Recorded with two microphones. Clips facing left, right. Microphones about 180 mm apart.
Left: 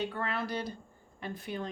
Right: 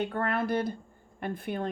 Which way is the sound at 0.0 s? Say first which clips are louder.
Right 5 dB; 55° right (ahead or behind).